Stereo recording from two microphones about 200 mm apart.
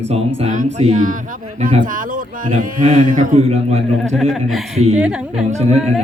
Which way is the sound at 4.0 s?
Centre (ahead or behind).